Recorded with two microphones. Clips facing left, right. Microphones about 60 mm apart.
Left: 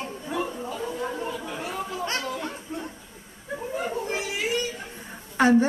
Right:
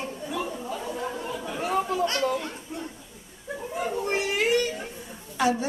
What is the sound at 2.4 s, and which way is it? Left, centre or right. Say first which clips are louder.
Chatter: left 2 dB; left.